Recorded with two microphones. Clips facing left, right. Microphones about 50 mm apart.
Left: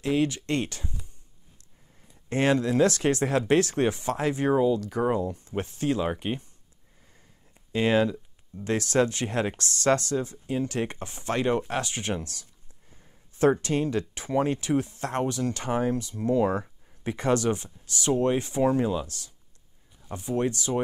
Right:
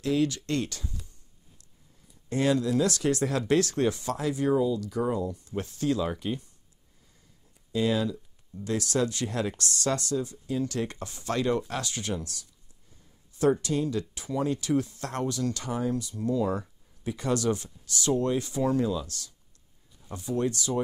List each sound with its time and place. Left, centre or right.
0.0 s speech: left
2.2 s speech: left
7.7 s speech: left